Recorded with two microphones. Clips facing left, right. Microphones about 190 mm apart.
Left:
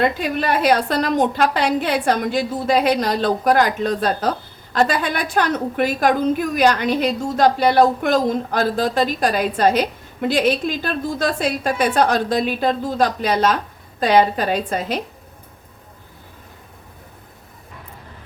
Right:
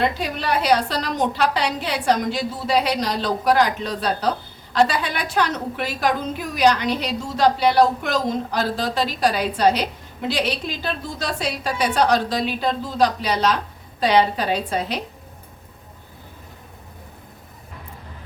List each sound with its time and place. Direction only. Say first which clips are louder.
0.0 s a woman's voice: left 4 dB; 50° left (ahead or behind)